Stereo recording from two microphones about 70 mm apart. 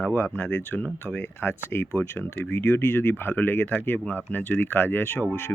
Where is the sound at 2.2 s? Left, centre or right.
Left.